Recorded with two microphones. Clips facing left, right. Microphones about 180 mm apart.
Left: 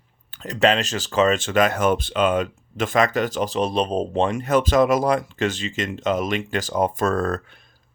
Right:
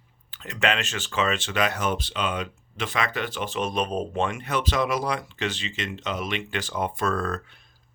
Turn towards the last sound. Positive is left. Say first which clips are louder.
# left 5 dB
turn(degrees=45)  # may be behind; listen again after turning